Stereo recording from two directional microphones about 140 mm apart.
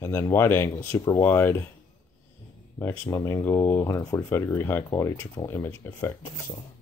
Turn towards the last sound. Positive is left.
turn(degrees=15)  # may be behind; listen again after turning